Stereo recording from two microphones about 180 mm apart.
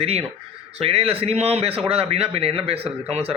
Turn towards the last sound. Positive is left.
turn(degrees=-35)  # may be behind; listen again after turning